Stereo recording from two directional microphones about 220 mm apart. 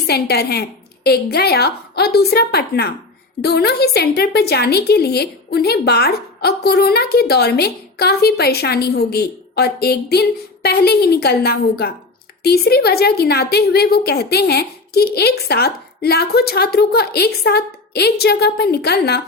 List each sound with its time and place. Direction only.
0.1 s a woman's voice: 45° left (ahead or behind)